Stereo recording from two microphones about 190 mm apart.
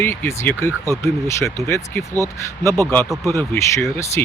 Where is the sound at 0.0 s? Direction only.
10° left (ahead or behind).